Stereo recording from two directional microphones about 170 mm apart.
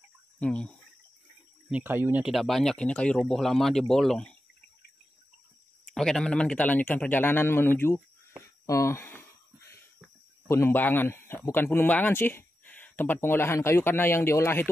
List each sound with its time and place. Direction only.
0.4 s speech: 5° left (ahead or behind)
1.7 s speech: 10° right (ahead or behind)
5.9 s speech: 5° left (ahead or behind)
8.6 s a sound: 15° left (ahead or behind)
10.5 s speech: 15° left (ahead or behind)